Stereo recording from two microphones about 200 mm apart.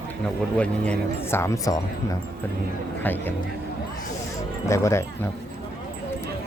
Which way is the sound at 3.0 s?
10° left (ahead or behind).